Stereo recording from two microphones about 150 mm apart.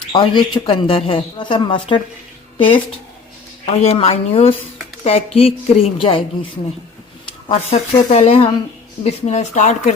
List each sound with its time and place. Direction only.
0.1 s speech: 30° left (ahead or behind)
7.7 s speech: 45° left (ahead or behind)